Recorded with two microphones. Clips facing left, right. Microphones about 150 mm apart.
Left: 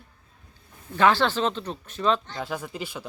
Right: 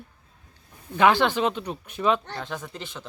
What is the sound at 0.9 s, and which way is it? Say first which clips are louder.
Speech: right 1 dB; 15° right (ahead or behind).